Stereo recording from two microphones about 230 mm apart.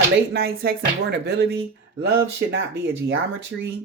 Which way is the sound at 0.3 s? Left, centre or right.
Right.